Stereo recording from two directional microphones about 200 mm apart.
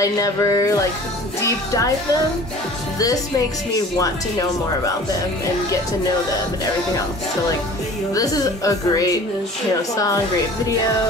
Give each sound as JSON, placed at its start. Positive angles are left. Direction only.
{"t": 0.0, "sound": "a woman's voice", "side_deg": 15}
{"t": 4.0, "sound": "a woman's voice", "side_deg": 15}
{"t": 8.1, "sound": "a woman's voice", "side_deg": 15}